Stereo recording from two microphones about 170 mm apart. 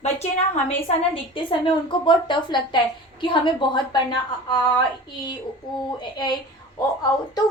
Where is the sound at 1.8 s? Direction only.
30° left (ahead or behind).